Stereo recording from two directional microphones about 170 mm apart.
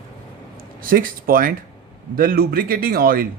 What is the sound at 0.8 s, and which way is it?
A man's voice, 60° right (ahead or behind).